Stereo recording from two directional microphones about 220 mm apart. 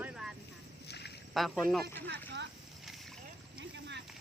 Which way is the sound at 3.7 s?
55° right (ahead or behind).